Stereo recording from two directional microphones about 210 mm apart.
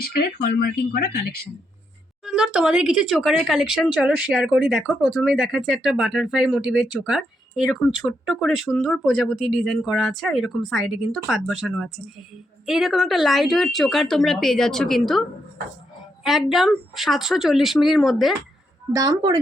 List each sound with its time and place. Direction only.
0.0 s speech: 45° left (ahead or behind)
2.2 s speech: 5° right (ahead or behind)
16.2 s speech: centre (ahead or behind)
18.9 s a woman's voice: 20° right (ahead or behind)